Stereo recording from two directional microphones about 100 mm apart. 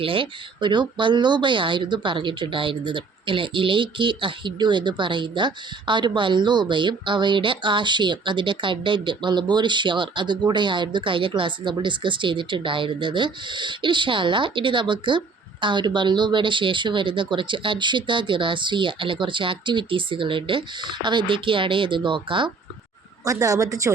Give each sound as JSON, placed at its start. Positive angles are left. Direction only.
{"t": 0.0, "sound": "speech", "side_deg": -60}
{"t": 23.2, "sound": "a woman's voice", "side_deg": -35}